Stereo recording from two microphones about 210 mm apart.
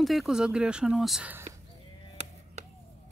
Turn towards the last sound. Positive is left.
turn(degrees=-30)  # may be behind; listen again after turning